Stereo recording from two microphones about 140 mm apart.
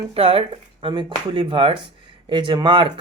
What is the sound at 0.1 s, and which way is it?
Speech, 40° right (ahead or behind).